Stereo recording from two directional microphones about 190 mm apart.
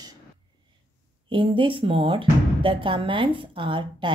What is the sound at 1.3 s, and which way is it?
Speech, 25° right (ahead or behind).